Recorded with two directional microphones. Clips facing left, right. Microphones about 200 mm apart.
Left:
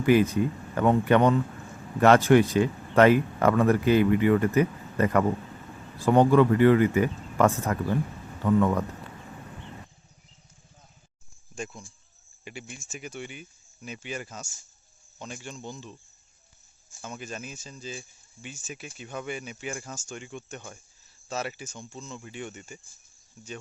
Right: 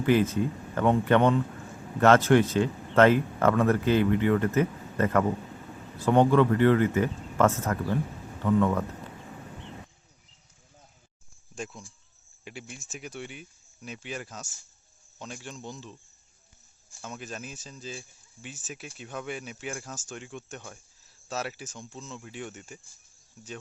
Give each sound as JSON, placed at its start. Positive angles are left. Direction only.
{"t": 0.0, "sound": "speech", "side_deg": 10}
{"t": 11.5, "sound": "a sound", "side_deg": 0}
{"t": 12.5, "sound": "speech", "side_deg": 0}
{"t": 17.0, "sound": "speech", "side_deg": 0}